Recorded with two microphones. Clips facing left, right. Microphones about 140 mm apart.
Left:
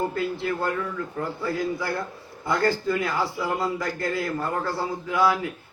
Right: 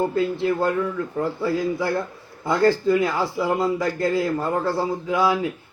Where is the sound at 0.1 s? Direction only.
20° right (ahead or behind).